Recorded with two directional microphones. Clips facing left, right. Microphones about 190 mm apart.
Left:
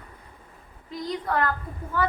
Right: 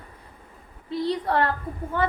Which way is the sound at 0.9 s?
30° right (ahead or behind).